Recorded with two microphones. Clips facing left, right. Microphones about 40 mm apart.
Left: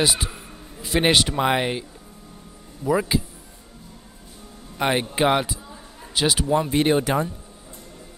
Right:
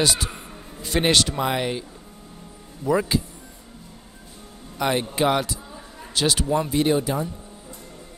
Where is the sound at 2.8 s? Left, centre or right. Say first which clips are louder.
Even; centre.